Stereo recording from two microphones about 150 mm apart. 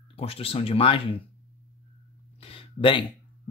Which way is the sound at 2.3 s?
40° left (ahead or behind).